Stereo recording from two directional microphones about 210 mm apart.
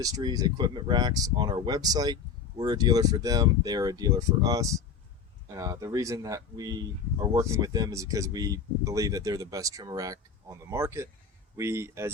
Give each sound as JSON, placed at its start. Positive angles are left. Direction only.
{"t": 0.0, "sound": "speech", "side_deg": -20}